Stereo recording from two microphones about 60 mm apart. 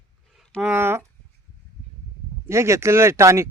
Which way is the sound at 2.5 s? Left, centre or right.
Right.